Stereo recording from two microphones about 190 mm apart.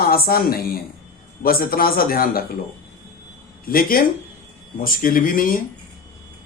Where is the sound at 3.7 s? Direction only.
50° left (ahead or behind).